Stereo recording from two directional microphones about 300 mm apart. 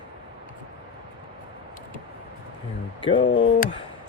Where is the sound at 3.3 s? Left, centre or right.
Left.